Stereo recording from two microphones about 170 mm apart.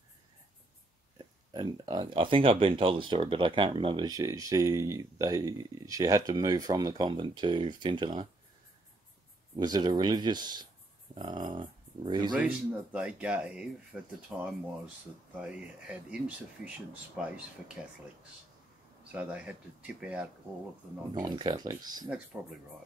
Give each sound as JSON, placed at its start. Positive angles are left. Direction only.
{"t": 1.1, "sound": "speech", "side_deg": -25}
{"t": 9.6, "sound": "speech", "side_deg": -25}
{"t": 12.4, "sound": "a man's voice", "side_deg": -5}
{"t": 19.1, "sound": "a man's voice", "side_deg": -5}
{"t": 21.1, "sound": "speech", "side_deg": -25}
{"t": 22.3, "sound": "a man's voice", "side_deg": -10}